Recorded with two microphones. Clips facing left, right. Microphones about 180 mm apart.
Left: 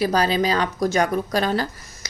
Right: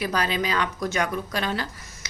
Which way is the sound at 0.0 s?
35° left (ahead or behind).